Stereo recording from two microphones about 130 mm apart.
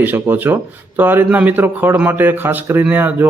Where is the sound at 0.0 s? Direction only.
15° right (ahead or behind).